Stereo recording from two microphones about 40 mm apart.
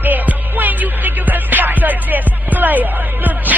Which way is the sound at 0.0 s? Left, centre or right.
Right.